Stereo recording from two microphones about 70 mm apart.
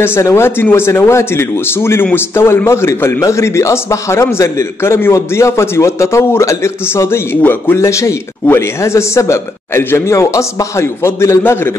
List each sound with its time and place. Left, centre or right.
0.0 s a man's voice: left